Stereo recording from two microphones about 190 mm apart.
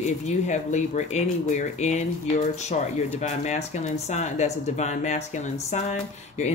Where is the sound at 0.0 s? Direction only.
40° left (ahead or behind).